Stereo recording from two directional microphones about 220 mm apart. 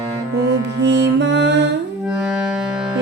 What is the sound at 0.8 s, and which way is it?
Music, 55° right (ahead or behind).